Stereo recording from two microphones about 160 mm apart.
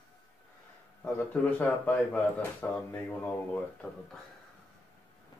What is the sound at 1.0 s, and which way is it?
A man's voice, 10° left (ahead or behind).